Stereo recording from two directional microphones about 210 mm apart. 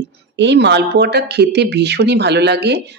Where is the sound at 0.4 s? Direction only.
55° right (ahead or behind).